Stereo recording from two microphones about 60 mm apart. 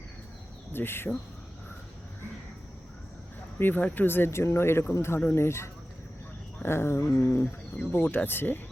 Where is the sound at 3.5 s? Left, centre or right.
Left.